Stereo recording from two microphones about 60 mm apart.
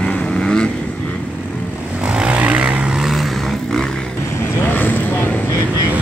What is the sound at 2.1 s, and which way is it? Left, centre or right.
Vehicle, centre.